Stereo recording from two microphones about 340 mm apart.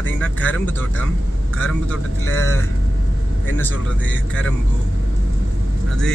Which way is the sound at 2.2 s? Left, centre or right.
Left.